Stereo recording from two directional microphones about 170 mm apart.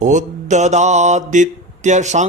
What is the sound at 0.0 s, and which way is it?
Speech, 45° right (ahead or behind).